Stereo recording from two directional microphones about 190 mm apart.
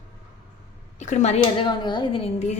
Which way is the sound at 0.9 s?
40° left (ahead or behind).